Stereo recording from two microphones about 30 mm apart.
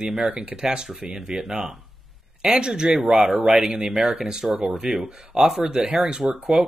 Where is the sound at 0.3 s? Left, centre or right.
Right.